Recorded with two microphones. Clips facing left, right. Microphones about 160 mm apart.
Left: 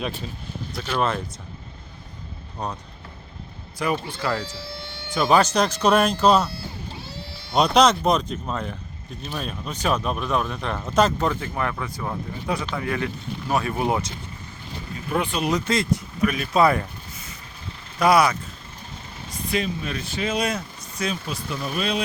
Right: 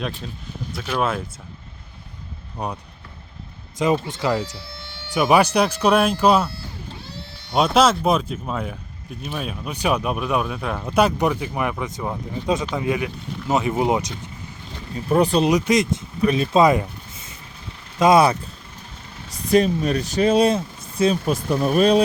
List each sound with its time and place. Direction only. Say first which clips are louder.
0.7 s speech: right 1 dB; 5° right (ahead or behind)
2.6 s speech: right 2 dB; 10° right (ahead or behind)
3.8 s speech: right 5 dB; 20° right (ahead or behind)
7.5 s speech: right 1 dB; 5° right (ahead or behind)
14.9 s speech: right 8 dB; 35° right (ahead or behind)
15.4 s speech: right 4 dB; 15° right (ahead or behind)
18.0 s speech: right 3 dB; 25° right (ahead or behind)
19.5 s speech: right 9 dB; 40° right (ahead or behind)
21.2 s speech: right 9 dB; 45° right (ahead or behind)